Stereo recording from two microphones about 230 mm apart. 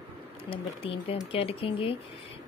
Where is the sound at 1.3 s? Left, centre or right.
Left.